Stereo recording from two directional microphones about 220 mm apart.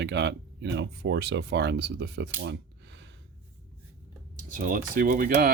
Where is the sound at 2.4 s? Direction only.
50° right (ahead or behind).